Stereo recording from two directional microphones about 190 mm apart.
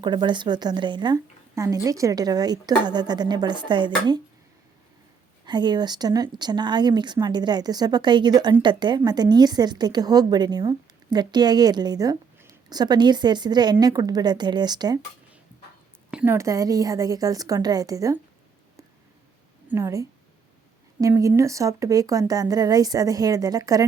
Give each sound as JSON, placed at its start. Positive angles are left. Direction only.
{"t": 0.0, "sound": "a woman's voice", "side_deg": -25}
{"t": 5.5, "sound": "a woman's voice", "side_deg": -25}
{"t": 16.1, "sound": "a woman's voice", "side_deg": -10}
{"t": 19.6, "sound": "a woman's voice", "side_deg": -15}